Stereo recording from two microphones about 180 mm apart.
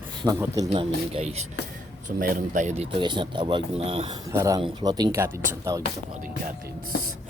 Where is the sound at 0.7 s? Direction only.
35° right (ahead or behind).